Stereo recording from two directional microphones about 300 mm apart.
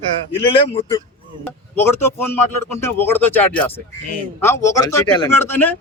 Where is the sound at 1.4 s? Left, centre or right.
Centre.